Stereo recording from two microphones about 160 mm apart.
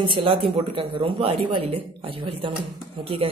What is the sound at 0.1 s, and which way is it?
Speech, 35° right (ahead or behind).